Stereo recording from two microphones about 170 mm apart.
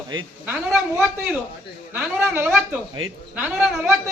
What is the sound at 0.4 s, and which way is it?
A woman's voice, 10° right (ahead or behind).